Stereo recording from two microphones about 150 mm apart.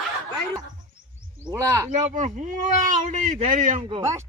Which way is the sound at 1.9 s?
55° right (ahead or behind).